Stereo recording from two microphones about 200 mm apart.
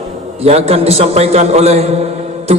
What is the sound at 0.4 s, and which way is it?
A man's voice, 30° right (ahead or behind).